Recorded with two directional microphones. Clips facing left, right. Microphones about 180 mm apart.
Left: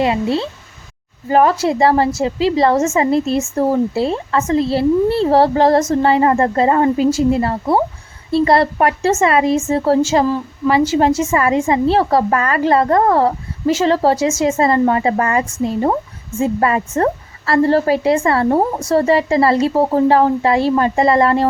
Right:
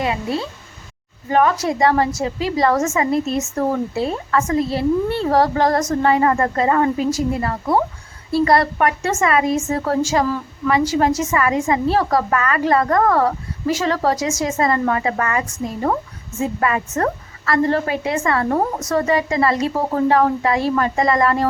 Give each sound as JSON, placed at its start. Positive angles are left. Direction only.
{"t": 0.0, "sound": "a woman's voice", "side_deg": 30}